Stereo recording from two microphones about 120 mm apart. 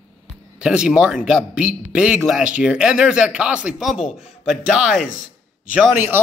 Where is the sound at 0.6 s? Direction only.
5° right (ahead or behind).